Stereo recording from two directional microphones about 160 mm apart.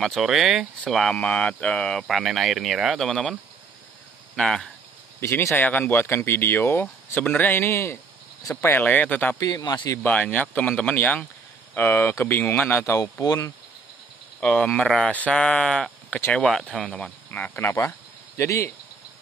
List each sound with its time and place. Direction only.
0.0 s speech: centre (ahead or behind)
4.4 s speech: 5° left (ahead or behind)
5.2 s speech: 15° left (ahead or behind)
9.4 s speech: 25° left (ahead or behind)
10.0 s speech: 10° left (ahead or behind)
14.4 s speech: 5° left (ahead or behind)